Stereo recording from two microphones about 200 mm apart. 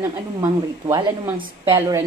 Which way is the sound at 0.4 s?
15° right (ahead or behind).